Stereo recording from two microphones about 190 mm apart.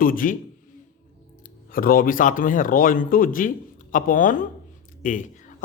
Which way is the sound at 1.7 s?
50° left (ahead or behind).